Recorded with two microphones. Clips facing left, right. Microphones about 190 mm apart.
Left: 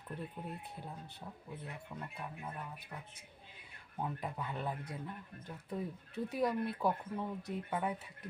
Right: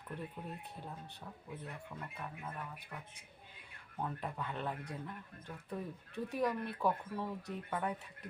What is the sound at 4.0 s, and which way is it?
Speech, 10° left (ahead or behind).